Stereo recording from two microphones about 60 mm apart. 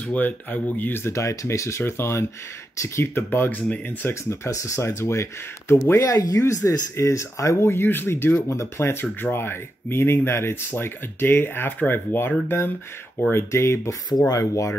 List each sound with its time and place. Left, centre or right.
0.0 s speech: left
1.0 s speech: left
4.5 s speech: left
5.9 s speech: left
7.0 s speech: left
7.6 s speech: left
13.3 s speech: left
14.3 s speech: left